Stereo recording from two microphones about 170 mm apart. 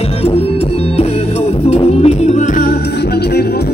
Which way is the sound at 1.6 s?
40° left (ahead or behind).